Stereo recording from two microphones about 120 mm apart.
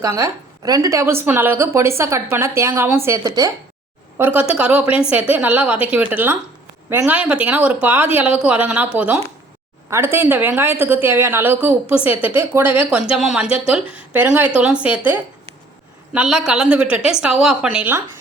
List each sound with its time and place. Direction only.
0.0 s a woman's voice: 30° right (ahead or behind)
4.2 s a woman's voice: 15° right (ahead or behind)